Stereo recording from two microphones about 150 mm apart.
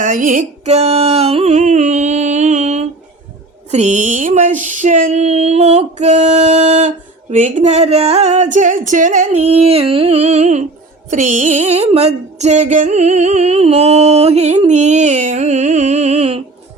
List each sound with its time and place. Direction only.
0.0 s music: 65° right (ahead or behind)
3.7 s female singing: 50° right (ahead or behind)